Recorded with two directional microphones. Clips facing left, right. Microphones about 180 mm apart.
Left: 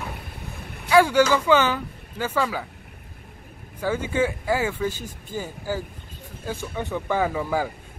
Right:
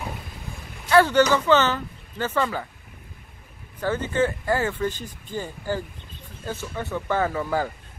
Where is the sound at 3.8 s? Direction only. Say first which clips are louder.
Even; 10° left (ahead or behind).